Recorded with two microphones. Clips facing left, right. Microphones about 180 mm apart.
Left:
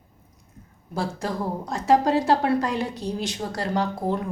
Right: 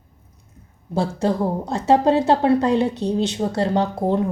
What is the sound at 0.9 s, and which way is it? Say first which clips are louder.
A woman's voice: right 7 dB; 25° right (ahead or behind).